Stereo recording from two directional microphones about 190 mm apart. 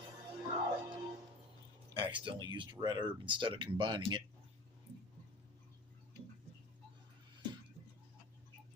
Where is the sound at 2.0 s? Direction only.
25° right (ahead or behind).